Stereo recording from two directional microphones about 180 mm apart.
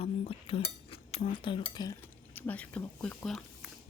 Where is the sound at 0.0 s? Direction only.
30° left (ahead or behind).